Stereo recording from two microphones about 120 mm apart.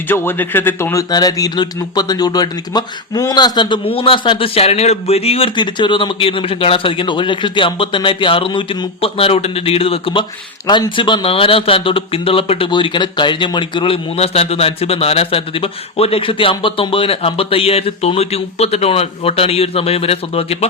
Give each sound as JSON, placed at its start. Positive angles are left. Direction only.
{"t": 0.1, "sound": "a man's voice", "side_deg": 15}
{"t": 1.1, "sound": "speech", "side_deg": 30}
{"t": 5.5, "sound": "speech", "side_deg": 40}
{"t": 10.7, "sound": "speech", "side_deg": 40}